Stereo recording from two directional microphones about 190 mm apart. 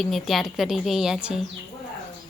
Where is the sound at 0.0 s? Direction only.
Centre (ahead or behind).